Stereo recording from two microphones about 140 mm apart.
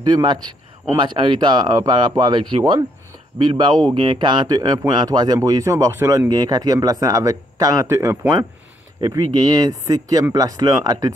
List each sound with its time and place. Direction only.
0.0 s a man's voice: 30° right (ahead or behind)